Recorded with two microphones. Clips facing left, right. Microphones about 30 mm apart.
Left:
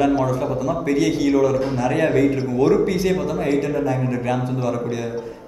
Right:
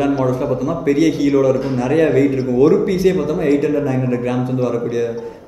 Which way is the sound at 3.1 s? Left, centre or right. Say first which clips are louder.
Right 4 dB; centre.